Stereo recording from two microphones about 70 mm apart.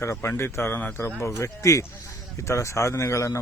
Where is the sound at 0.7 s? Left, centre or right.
Left.